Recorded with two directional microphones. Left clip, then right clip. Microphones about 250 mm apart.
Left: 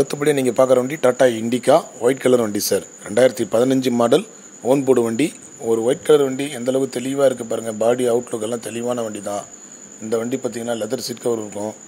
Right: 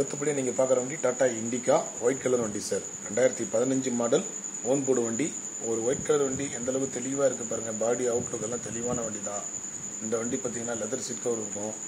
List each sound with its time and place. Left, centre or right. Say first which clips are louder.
0.0 s speech: left 11 dB; left